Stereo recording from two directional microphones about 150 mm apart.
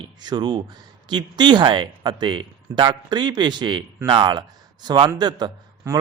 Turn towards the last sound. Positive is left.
turn(degrees=-25)  # may be behind; listen again after turning